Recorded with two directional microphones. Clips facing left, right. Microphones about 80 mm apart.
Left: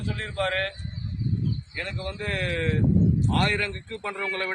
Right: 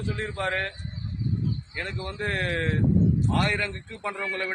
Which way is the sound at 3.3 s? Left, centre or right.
Centre.